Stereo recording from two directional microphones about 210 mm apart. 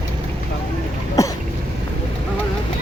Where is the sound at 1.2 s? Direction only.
15° left (ahead or behind).